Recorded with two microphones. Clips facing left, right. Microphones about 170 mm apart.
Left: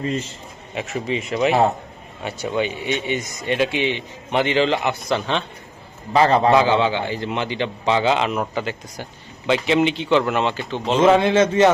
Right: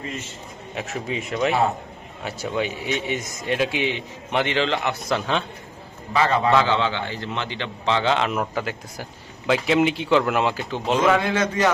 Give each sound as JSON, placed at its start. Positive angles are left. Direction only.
{"t": 0.7, "sound": "a man's voice", "side_deg": 0}
{"t": 6.1, "sound": "a man's voice", "side_deg": 35}
{"t": 6.5, "sound": "a man's voice", "side_deg": 15}
{"t": 11.0, "sound": "a man's voice", "side_deg": 25}